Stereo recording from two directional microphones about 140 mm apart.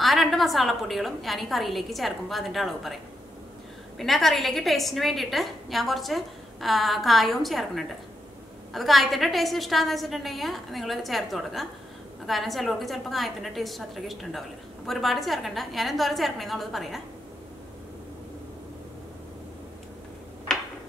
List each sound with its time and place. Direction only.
0.0 s a woman's voice: centre (ahead or behind)
4.0 s a woman's voice: centre (ahead or behind)
20.5 s a sound: 5° left (ahead or behind)